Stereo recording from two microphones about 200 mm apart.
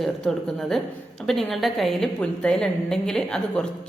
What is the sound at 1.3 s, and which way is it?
A woman's voice, centre (ahead or behind).